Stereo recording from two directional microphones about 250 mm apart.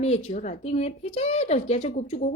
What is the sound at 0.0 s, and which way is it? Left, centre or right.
A woman's voice, left.